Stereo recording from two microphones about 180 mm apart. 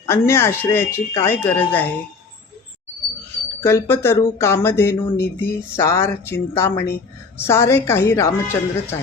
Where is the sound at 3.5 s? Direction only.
15° left (ahead or behind).